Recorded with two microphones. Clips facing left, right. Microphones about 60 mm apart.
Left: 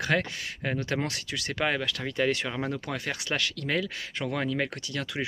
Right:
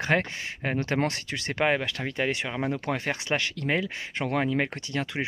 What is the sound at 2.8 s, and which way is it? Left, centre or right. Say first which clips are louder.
Speech: right 4 dB; right.